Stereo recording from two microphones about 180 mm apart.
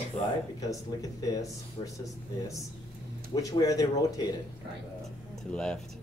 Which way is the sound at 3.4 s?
20° left (ahead or behind).